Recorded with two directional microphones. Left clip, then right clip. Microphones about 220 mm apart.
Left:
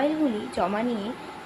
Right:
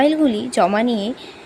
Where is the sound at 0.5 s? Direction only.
45° right (ahead or behind).